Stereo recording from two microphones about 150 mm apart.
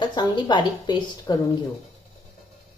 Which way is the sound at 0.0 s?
30° left (ahead or behind).